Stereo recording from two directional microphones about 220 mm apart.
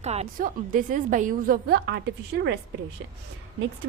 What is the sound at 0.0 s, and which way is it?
A woman's voice, 30° right (ahead or behind).